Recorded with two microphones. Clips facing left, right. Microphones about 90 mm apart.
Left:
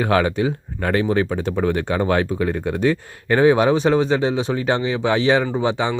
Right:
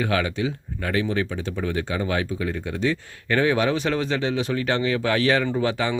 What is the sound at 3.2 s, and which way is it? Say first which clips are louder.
Speech: left 6 dB; 30° left (ahead or behind).